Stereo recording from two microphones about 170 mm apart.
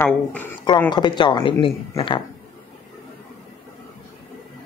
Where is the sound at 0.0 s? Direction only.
10° left (ahead or behind).